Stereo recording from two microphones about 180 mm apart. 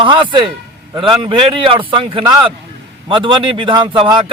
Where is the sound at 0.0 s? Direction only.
25° right (ahead or behind).